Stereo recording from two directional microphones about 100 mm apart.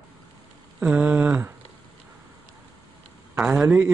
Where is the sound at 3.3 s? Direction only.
5° right (ahead or behind).